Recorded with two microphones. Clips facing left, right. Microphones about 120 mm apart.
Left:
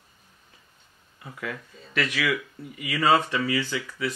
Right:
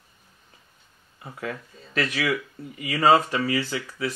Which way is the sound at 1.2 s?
35° right (ahead or behind).